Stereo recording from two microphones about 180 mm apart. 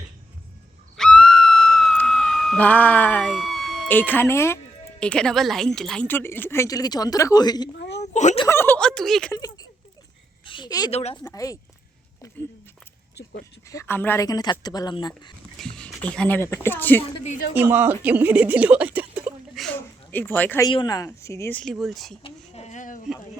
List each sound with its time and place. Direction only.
0.9 s speech: 5° left (ahead or behind); by 7.7 s 25° left (ahead or behind)
8.0 s speech: 40° left (ahead or behind)
8.4 s speech: 10° left (ahead or behind)
9.3 s a woman's voice: 20° left (ahead or behind)
10.9 s a woman's voice: 35° left (ahead or behind)
13.7 s speech: 15° left (ahead or behind)
15.5 s speech: 5° left (ahead or behind)
17.0 s a woman's voice: 40° left (ahead or behind)
17.5 s speech: 10° right (ahead or behind)
19.6 s speech: 10° left (ahead or behind)
20.7 s speech: 25° left (ahead or behind)
21.6 s speech: centre (ahead or behind)
22.2 s a sound: 35° left (ahead or behind)